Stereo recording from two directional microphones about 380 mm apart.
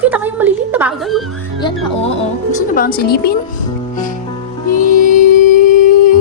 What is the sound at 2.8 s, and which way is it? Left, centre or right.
Speech, left.